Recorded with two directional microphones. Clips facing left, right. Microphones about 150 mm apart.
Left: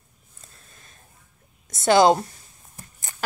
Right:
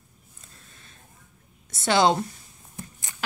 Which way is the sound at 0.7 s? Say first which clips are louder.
Right 1 dB; 40° left (ahead or behind).